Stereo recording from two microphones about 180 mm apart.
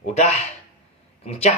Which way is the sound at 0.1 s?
35° left (ahead or behind).